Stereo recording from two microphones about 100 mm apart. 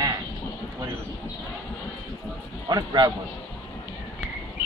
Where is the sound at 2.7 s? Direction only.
40° right (ahead or behind).